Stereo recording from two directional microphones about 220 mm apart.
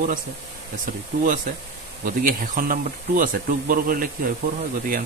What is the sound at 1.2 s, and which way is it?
Speech, 35° right (ahead or behind).